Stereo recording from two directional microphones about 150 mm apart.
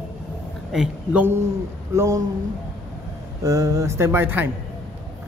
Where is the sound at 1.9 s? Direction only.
20° right (ahead or behind).